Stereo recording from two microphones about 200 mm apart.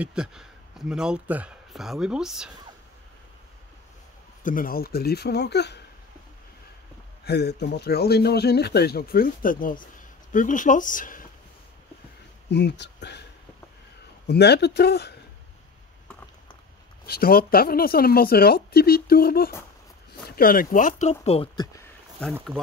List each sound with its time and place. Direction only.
0.0 s speech: 5° right (ahead or behind)
4.4 s speech: 40° left (ahead or behind)
7.2 s speech: 55° left (ahead or behind)
12.4 s speech: 55° left (ahead or behind)
14.2 s speech: 55° left (ahead or behind)
17.0 s speech: 50° left (ahead or behind); by 21.5 s 30° left (ahead or behind)
21.5 s speech: 15° left (ahead or behind)